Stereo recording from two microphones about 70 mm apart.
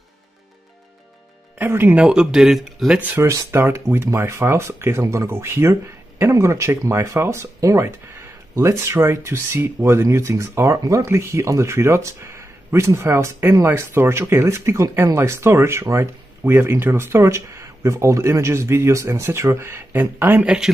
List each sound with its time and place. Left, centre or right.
1.7 s speech: right
2.0 s speech: centre
3.2 s speech: right
10.8 s speech: right
11.1 s speech: right
16.4 s speech: right
20.4 s speech: centre